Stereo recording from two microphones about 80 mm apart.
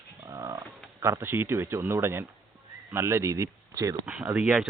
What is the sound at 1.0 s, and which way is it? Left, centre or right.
Speech, right.